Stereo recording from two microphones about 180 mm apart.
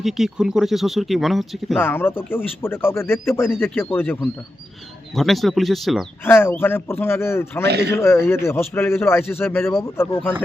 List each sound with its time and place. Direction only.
0.0 s speech: 5° right (ahead or behind)
1.8 s speech: 10° left (ahead or behind)
6.2 s speech: 10° left (ahead or behind)
7.7 s speech: 65° right (ahead or behind)
7.9 s speech: 15° left (ahead or behind)